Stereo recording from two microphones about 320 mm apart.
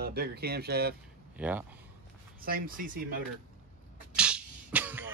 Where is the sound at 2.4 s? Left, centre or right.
Right.